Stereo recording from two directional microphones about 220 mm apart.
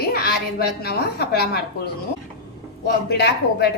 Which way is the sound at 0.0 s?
45° left (ahead or behind).